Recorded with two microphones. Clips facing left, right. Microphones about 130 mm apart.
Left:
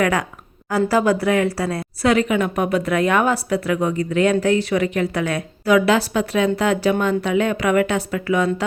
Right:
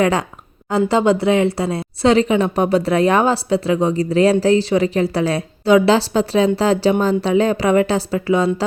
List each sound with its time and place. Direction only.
0.0 s a woman's voice: 30° right (ahead or behind)